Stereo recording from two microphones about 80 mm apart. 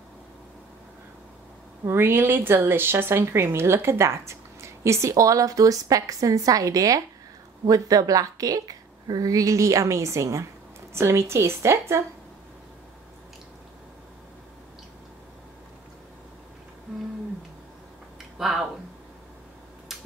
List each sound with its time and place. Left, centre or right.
1.9 s a woman's voice: right
18.4 s speech: centre
19.9 s a sound: centre